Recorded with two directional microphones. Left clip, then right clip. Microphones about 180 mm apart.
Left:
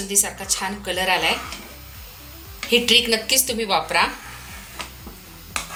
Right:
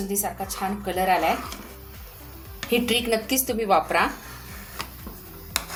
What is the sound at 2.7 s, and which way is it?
A woman's voice, 50° right (ahead or behind).